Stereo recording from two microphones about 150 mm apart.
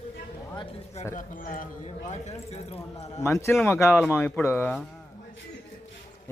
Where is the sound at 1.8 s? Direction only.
45° left (ahead or behind).